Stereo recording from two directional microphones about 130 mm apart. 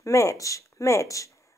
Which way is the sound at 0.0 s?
25° left (ahead or behind).